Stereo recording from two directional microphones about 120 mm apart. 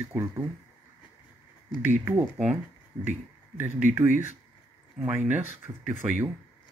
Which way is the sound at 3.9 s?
15° right (ahead or behind).